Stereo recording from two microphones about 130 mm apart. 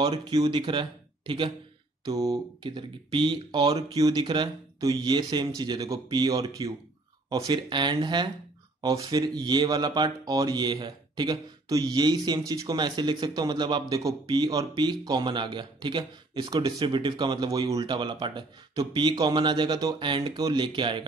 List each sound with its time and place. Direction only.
0.0 s speech: 30° right (ahead or behind)